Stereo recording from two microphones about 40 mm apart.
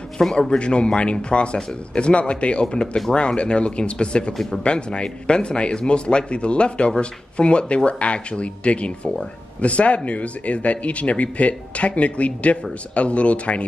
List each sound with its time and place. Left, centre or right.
0.2 s speech: left
4.3 s speech: centre
4.6 s speech: left